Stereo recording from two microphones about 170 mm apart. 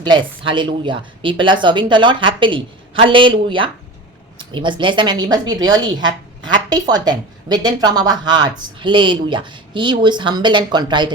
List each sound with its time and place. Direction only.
0.0 s a woman's voice: 30° right (ahead or behind)